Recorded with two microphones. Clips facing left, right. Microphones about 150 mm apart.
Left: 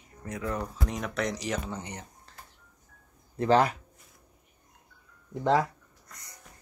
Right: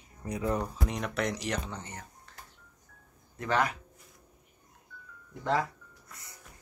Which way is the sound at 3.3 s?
30° left (ahead or behind).